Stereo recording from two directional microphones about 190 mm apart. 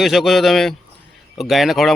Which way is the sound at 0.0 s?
Centre (ahead or behind).